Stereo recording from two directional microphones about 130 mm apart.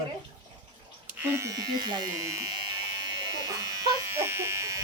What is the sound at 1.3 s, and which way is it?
Speech, 25° right (ahead or behind).